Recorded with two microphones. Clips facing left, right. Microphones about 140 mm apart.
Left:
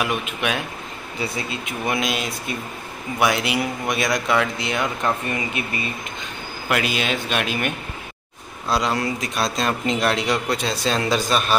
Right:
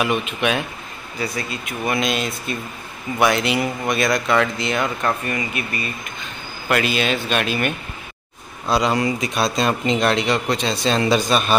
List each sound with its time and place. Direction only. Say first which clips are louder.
0.0 s speech: right 3 dB; 10° left (ahead or behind)
1.2 s speech: right 1 dB; 25° left (ahead or behind)
2.0 s speech: right 2 dB; 10° left (ahead or behind)
5.3 s speech: right 1 dB; 20° left (ahead or behind)
6.7 s speech: right 3 dB; 10° left (ahead or behind)
8.6 s speech: right 3 dB; centre (ahead or behind)